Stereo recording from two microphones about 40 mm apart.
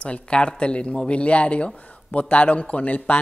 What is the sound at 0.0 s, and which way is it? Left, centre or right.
A man's voice, left.